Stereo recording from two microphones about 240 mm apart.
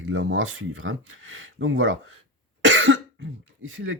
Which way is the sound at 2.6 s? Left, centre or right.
Right.